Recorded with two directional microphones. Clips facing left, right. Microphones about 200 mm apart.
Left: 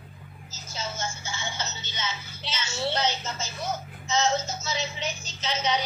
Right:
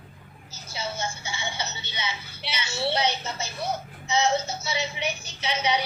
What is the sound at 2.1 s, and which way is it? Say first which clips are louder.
Speech: right 1 dB; 60° right (ahead or behind).